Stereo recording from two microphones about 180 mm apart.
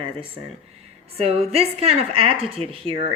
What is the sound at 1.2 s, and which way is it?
Speech, 35° right (ahead or behind).